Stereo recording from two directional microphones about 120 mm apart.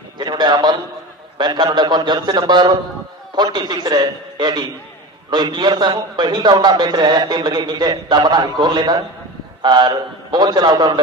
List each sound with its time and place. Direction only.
0.2 s a man's voice: 35° right (ahead or behind)